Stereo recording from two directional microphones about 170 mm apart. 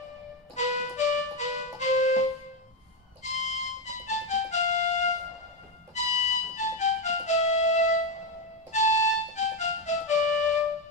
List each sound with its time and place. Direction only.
0.6 s music: 45° left (ahead or behind)